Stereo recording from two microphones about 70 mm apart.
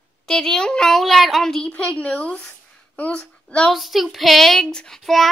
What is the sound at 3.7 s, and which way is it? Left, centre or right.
Child singing, centre.